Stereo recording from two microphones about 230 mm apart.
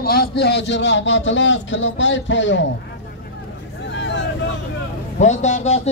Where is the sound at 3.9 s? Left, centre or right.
Left.